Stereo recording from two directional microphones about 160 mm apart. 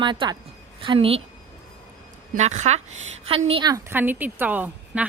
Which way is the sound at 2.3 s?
45° right (ahead or behind).